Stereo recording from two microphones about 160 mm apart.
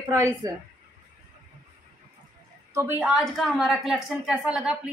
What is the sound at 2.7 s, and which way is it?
A woman's voice, 15° right (ahead or behind).